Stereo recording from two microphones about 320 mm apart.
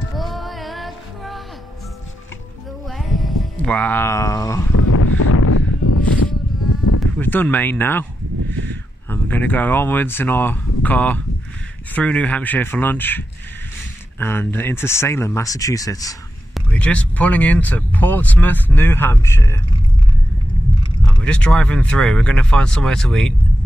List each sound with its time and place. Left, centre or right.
0.1 s music: centre
3.0 s a sound: centre
4.7 s a sound: left
7.0 s speech: centre
9.1 s speech: centre
14.2 s speech: centre
21.2 s speech: centre